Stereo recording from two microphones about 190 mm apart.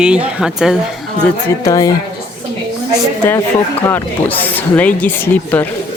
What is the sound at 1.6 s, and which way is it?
Speech, 20° left (ahead or behind).